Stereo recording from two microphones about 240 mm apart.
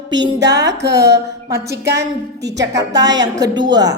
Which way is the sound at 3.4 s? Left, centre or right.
Centre.